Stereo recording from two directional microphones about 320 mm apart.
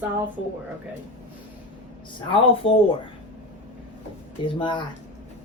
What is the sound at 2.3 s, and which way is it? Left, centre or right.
Speech, centre.